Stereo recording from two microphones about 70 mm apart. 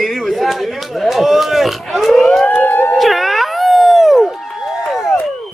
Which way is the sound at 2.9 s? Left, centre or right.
Centre.